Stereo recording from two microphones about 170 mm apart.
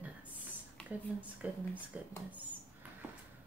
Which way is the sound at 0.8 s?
5° left (ahead or behind).